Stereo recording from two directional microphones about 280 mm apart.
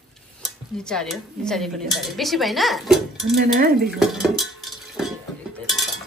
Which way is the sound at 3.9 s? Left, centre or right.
Centre.